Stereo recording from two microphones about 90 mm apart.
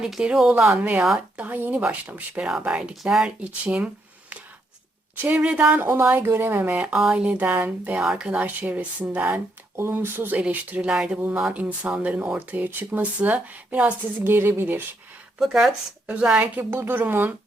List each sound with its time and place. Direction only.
0.0 s speech: 5° right (ahead or behind)
0.5 s speech: 20° right (ahead or behind)
5.2 s speech: 15° right (ahead or behind)
6.8 s speech: 5° right (ahead or behind); by 14.8 s 25° right (ahead or behind)
15.4 s speech: 5° right (ahead or behind)
16.6 s speech: 20° right (ahead or behind)